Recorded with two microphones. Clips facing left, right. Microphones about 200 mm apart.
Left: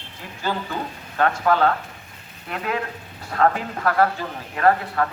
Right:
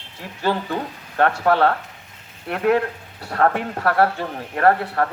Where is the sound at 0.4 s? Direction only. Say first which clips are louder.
Right 4 dB; 65° right (ahead or behind).